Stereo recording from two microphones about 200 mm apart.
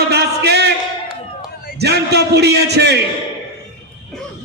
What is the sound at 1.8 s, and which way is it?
A man's voice, 55° right (ahead or behind).